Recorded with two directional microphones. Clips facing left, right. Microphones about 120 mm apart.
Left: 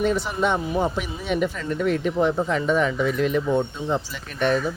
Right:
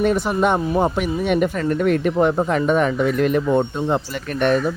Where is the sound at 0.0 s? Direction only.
55° right (ahead or behind).